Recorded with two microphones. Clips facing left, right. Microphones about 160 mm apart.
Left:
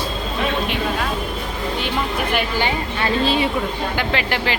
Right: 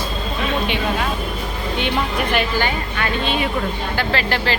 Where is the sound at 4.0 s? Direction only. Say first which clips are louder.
Right 2 dB; 15° left (ahead or behind).